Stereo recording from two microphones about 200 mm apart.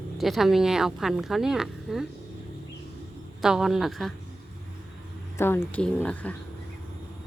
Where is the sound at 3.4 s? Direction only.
5° right (ahead or behind).